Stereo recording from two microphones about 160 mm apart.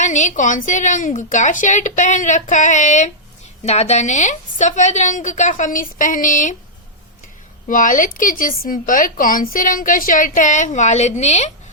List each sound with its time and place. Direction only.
0.0 s a woman's voice: 50° left (ahead or behind)
7.7 s speech: 55° left (ahead or behind)